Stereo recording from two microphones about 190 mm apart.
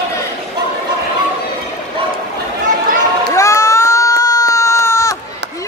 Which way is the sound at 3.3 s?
15° left (ahead or behind).